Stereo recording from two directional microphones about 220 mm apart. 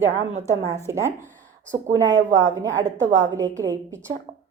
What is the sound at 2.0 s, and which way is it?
A woman's voice, 55° right (ahead or behind).